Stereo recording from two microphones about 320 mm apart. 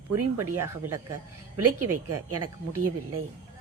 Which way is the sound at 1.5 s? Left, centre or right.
Right.